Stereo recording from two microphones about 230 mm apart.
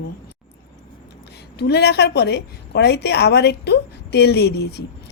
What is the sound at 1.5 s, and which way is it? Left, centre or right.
A woman's voice, left.